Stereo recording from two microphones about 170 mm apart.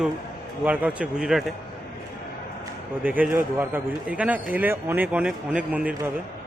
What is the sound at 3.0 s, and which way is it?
A man's voice, 10° right (ahead or behind).